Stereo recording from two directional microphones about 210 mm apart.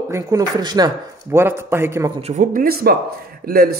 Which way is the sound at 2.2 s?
40° right (ahead or behind).